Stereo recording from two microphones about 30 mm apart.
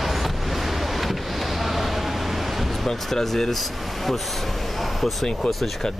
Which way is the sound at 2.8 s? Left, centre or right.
Centre.